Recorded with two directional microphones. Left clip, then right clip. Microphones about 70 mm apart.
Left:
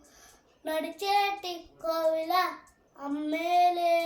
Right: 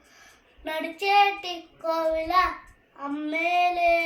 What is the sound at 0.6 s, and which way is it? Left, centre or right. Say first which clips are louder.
Child singing: right 4 dB; left.